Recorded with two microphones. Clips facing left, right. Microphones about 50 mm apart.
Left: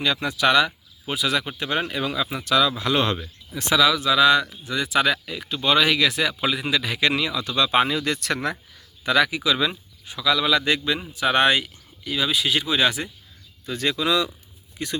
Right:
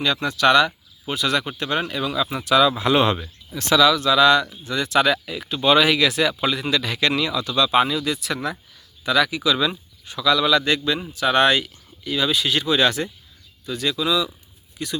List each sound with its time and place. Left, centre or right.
0.0 s speech: centre
2.3 s speech: centre
3.5 s speech: centre
7.4 s speech: left
8.0 s speech: left
9.0 s speech: left; by 13.1 s centre
13.7 s speech: left